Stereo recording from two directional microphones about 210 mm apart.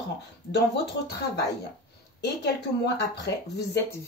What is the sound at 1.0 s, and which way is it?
Speech, 50° left (ahead or behind).